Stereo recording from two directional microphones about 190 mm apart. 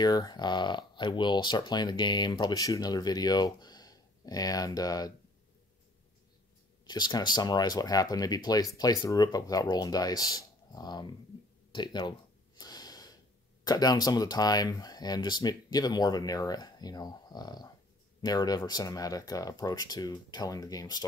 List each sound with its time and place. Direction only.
0.0 s speech: 20° left (ahead or behind)
6.9 s speech: 20° left (ahead or behind)
11.7 s a sound: 25° left (ahead or behind)
13.7 s speech: 20° left (ahead or behind)